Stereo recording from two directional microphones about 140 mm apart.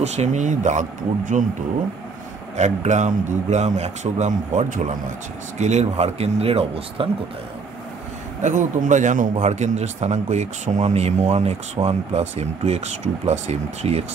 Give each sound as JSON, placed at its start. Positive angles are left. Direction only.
{"t": 0.0, "sound": "a man's voice", "side_deg": -55}
{"t": 2.5, "sound": "a man's voice", "side_deg": -55}
{"t": 5.6, "sound": "speech", "side_deg": -55}
{"t": 8.4, "sound": "a man's voice", "side_deg": -60}
{"t": 9.4, "sound": "speech", "side_deg": -55}